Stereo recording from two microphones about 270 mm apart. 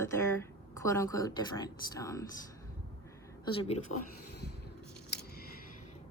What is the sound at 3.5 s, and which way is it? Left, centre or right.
Speech, centre.